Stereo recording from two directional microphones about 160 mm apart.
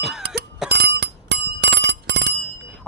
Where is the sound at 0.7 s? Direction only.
90° right.